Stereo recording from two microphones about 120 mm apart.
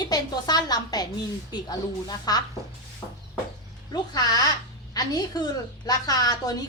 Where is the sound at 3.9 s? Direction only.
35° left (ahead or behind).